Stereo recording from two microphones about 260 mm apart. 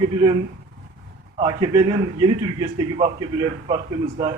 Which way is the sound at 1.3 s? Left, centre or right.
Centre.